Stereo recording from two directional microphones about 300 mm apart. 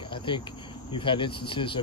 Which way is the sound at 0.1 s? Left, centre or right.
Centre.